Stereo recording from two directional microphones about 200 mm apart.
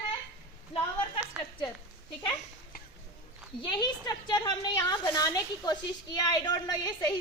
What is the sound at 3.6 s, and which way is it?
A woman's voice, 20° left (ahead or behind).